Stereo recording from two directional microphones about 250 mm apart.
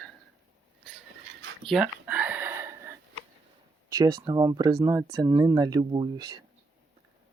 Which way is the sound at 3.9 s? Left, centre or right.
Centre.